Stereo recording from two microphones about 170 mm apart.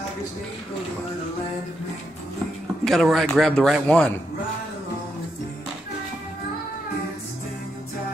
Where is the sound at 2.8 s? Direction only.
Centre (ahead or behind).